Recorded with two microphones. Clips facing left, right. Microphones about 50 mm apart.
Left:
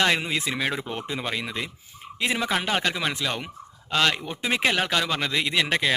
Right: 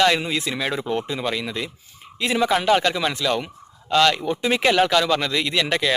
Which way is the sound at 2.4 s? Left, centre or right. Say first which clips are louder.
Right 9 dB; centre.